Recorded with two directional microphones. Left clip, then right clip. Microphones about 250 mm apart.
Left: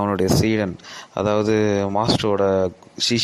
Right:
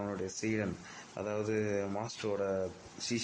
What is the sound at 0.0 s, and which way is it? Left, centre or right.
Speech, left.